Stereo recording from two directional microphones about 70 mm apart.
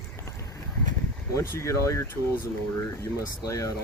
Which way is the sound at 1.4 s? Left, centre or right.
Left.